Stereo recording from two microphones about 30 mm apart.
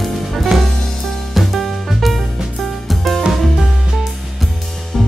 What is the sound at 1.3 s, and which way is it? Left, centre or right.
Music, centre.